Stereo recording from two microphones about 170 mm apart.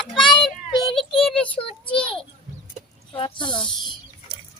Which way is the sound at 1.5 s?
30° left (ahead or behind).